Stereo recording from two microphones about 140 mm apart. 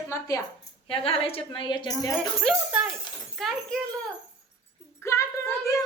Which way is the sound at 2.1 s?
5° right (ahead or behind).